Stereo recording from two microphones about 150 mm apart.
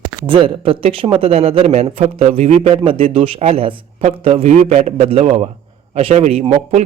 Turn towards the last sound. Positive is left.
turn(degrees=-45)  # may be behind; listen again after turning